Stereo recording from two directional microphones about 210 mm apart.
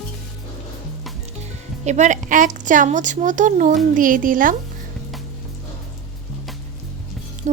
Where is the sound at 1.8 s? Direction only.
35° right (ahead or behind).